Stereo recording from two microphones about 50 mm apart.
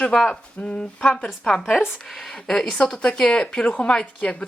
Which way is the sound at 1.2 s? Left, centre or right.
Centre.